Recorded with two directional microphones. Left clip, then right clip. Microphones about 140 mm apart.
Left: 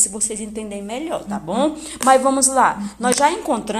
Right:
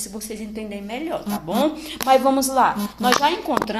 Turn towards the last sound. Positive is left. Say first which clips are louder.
# left 1 dB
turn(degrees=40)  # may be behind; listen again after turning